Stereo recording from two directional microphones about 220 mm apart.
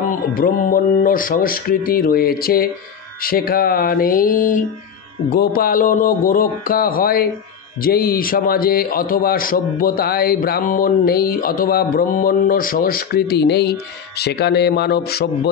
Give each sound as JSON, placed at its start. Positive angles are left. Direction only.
{"t": 0.3, "sound": "a man's voice", "side_deg": 40}